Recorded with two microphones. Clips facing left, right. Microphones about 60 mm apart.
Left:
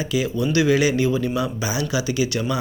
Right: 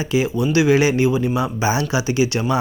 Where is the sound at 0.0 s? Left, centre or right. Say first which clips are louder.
Right 3 dB; right.